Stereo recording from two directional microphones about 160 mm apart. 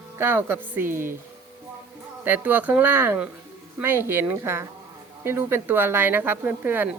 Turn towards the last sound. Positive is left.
turn(degrees=-10)  # may be behind; listen again after turning